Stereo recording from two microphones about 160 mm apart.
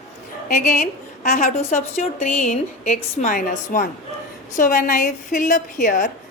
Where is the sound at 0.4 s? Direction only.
50° left (ahead or behind).